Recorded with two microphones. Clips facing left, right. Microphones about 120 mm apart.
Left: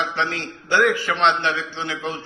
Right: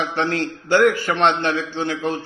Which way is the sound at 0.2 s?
50° right (ahead or behind).